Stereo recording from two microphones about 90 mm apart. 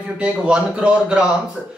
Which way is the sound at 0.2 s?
10° right (ahead or behind).